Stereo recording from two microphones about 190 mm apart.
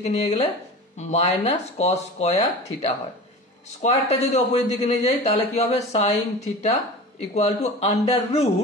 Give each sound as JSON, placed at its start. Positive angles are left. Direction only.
{"t": 0.0, "sound": "speech", "side_deg": 30}